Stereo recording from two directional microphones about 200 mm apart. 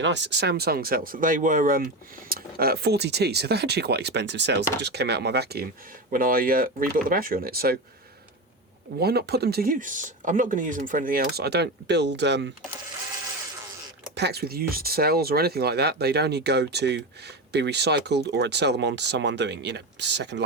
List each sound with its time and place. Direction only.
0.0 s speech: 60° right (ahead or behind)
9.0 s speech: 50° right (ahead or behind)
14.2 s speech: 55° right (ahead or behind)